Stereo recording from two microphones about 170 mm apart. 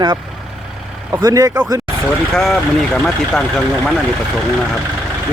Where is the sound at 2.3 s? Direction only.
Centre (ahead or behind).